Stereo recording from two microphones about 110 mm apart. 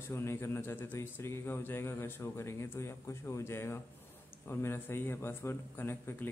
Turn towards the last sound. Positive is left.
turn(degrees=20)  # may be behind; listen again after turning